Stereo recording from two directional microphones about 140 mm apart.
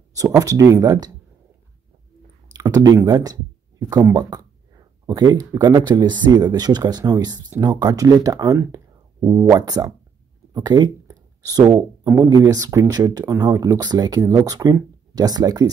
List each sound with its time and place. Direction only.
0.4 s speech: 25° right (ahead or behind)
2.5 s speech: 25° right (ahead or behind)
10.5 s a sound: 30° right (ahead or behind)
11.6 s speech: 30° right (ahead or behind)